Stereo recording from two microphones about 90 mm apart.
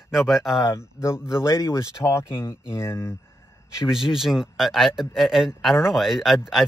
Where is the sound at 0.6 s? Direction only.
30° left (ahead or behind).